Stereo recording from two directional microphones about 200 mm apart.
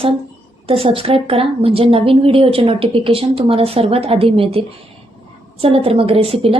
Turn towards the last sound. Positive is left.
turn(degrees=-30)  # may be behind; listen again after turning